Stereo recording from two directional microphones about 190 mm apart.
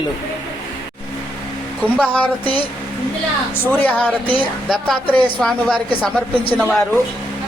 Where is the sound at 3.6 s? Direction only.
10° left (ahead or behind).